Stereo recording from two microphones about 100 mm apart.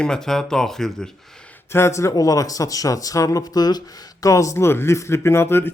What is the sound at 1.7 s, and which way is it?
Speech, 30° left (ahead or behind).